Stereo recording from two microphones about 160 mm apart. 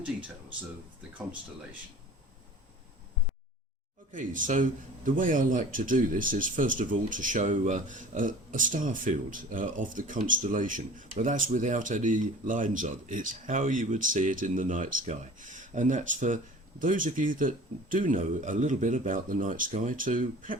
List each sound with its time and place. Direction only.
4.1 s speech: 55° right (ahead or behind)